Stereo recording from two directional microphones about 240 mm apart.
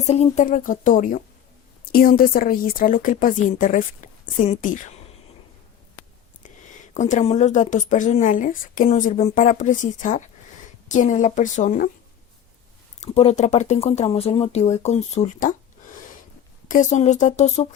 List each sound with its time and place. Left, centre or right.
0.1 s speech: left
6.9 s speech: left
13.0 s speech: left
16.6 s speech: left